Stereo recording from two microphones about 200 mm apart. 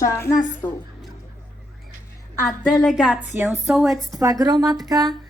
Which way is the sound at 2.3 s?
Centre (ahead or behind).